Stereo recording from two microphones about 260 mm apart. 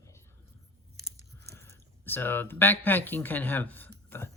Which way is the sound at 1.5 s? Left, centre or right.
Centre.